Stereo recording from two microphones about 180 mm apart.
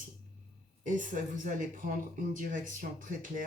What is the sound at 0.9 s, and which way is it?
Speech, 45° right (ahead or behind).